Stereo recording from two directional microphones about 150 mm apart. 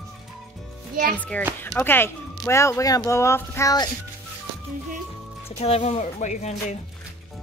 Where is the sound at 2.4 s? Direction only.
20° left (ahead or behind).